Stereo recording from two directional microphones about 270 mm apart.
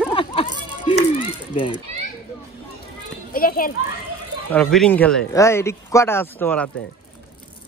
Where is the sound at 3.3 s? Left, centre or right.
Left.